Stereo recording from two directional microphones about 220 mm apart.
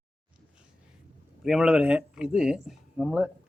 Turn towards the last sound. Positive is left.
turn(degrees=0)  # may be behind; listen again after turning